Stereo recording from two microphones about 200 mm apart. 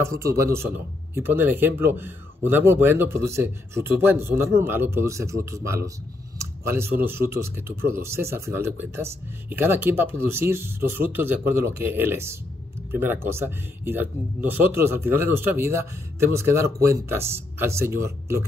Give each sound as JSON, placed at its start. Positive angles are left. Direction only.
{"t": 0.0, "sound": "speech", "side_deg": -15}